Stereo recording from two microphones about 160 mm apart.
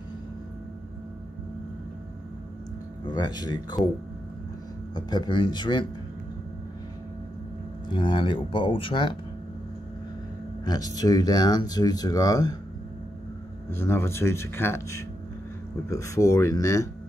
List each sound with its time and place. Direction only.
3.1 s speech: 25° left (ahead or behind)
4.9 s speech: 25° left (ahead or behind)
7.9 s speech: 30° left (ahead or behind)
10.6 s speech: 25° left (ahead or behind)
13.7 s speech: 15° left (ahead or behind)